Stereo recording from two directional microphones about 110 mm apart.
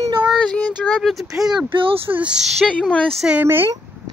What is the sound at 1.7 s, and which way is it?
Speech, 55° right (ahead or behind).